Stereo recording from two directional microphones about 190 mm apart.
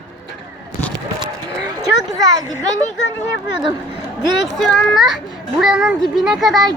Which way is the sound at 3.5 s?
25° right (ahead or behind).